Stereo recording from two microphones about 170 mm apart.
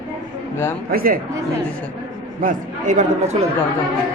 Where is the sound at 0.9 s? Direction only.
60° right (ahead or behind).